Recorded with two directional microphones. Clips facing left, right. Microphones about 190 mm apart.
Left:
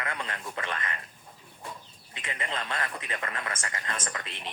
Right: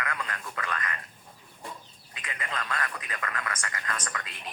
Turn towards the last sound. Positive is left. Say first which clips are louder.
# left 1 dB
turn(degrees=25)  # may be behind; listen again after turning